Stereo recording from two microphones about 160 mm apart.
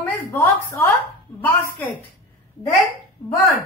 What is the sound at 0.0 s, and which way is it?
A woman's voice, 10° left (ahead or behind).